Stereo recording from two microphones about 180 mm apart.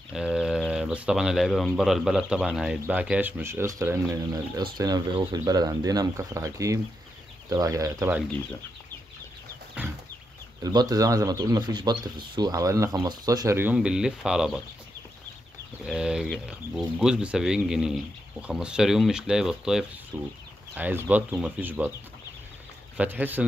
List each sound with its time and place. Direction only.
0.1 s speech: 5° right (ahead or behind)
9.8 s chicken: 10° right (ahead or behind)
10.6 s speech: 20° right (ahead or behind); by 14.6 s 5° right (ahead or behind)
15.8 s speech: 5° right (ahead or behind)
22.9 s speech: 10° right (ahead or behind)